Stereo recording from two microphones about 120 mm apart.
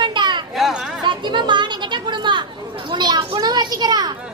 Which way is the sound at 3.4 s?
35° right (ahead or behind).